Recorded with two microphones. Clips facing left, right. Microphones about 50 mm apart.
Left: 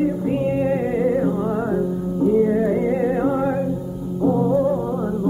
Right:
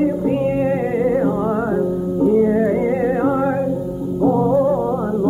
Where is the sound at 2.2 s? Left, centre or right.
Centre.